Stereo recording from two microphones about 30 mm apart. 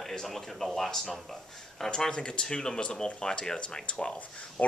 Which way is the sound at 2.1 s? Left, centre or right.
Left.